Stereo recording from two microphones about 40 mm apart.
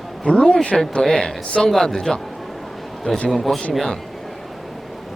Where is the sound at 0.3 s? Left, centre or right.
Left.